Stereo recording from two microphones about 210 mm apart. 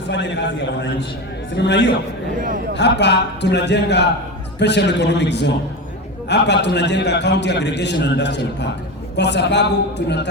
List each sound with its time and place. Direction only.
0.1 s a man's voice: 55° left (ahead or behind)